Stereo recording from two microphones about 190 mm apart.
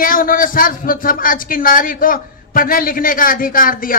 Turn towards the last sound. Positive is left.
turn(degrees=45)  # may be behind; listen again after turning